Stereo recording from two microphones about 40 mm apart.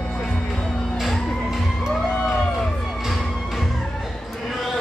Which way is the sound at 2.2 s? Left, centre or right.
Left.